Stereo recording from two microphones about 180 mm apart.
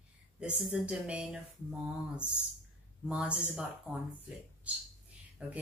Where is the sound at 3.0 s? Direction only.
5° right (ahead or behind).